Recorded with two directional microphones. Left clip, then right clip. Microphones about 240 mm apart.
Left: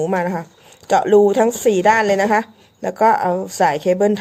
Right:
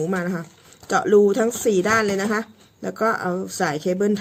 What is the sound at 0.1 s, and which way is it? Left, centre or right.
A woman's voice, right.